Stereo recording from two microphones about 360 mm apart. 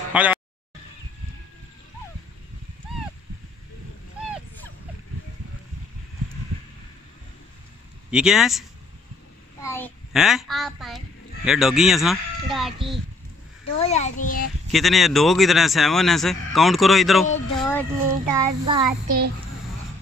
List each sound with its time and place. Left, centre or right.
0.1 s speech: centre
8.1 s a child's voice: centre
13.7 s a child's voice: centre
14.7 s speech: centre
17.6 s a sound: centre
18.0 s child singing: centre
19.0 s a child's voice: right